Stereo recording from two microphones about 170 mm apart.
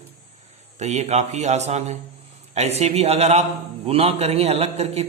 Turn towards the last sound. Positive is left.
turn(degrees=-40)  # may be behind; listen again after turning